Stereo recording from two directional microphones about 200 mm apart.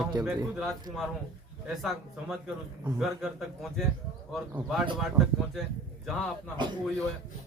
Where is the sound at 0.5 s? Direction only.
Centre (ahead or behind).